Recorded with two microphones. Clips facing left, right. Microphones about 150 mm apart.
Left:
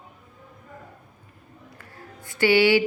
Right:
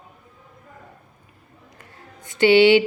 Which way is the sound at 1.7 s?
20° right (ahead or behind).